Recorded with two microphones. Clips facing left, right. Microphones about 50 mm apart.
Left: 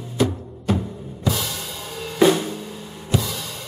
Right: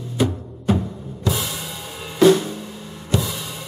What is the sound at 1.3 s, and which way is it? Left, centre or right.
Drum kit, centre.